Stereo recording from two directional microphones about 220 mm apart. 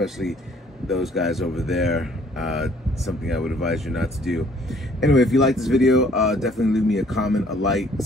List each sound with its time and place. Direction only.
0.0 s speech: centre (ahead or behind)